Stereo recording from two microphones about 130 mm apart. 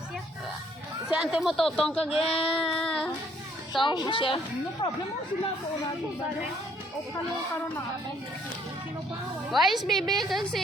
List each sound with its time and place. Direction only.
1.1 s a woman's voice: 5° right (ahead or behind)
2.1 s child singing: 50° left (ahead or behind)
2.6 s child singing: 5° left (ahead or behind)
3.7 s a child's voice: 35° left (ahead or behind)
4.8 s speech: 25° left (ahead or behind)
9.5 s a woman's voice: centre (ahead or behind)